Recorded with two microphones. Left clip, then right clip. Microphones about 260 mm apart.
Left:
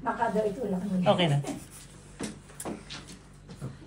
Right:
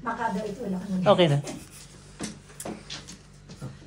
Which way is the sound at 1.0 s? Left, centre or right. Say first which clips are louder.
Right 5 dB; right.